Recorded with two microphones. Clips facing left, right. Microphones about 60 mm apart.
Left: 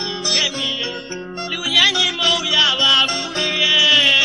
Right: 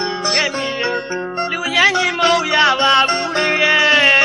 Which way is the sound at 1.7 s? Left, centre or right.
Right.